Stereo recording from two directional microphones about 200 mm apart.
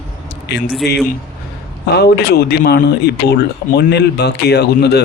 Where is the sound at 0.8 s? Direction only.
55° left (ahead or behind).